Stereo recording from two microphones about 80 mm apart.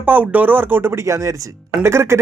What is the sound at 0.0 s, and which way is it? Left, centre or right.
Speech, right.